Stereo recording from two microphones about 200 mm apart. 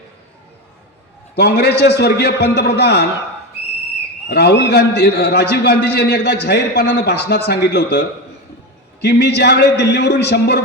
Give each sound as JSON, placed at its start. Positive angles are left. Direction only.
{"t": 1.4, "sound": "a man's voice", "side_deg": 55}
{"t": 4.3, "sound": "a man's voice", "side_deg": 55}